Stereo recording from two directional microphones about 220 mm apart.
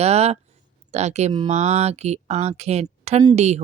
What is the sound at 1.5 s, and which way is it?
Speech, 30° right (ahead or behind).